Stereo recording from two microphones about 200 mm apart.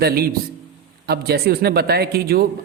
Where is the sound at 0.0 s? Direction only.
50° right (ahead or behind).